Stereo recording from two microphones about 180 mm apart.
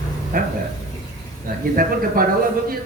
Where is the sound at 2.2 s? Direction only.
55° right (ahead or behind).